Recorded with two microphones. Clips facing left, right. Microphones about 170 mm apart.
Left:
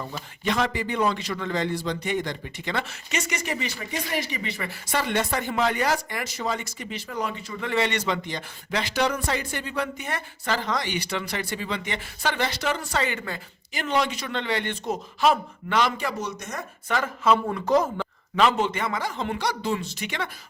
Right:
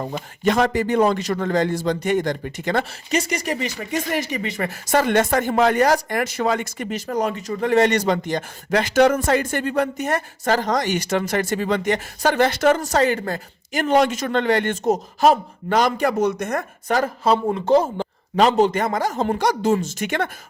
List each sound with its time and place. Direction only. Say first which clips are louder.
0.0 s a man's voice: right 8 dB; 45° right (ahead or behind)
16.9 s a man's voice: right 4 dB; 35° right (ahead or behind)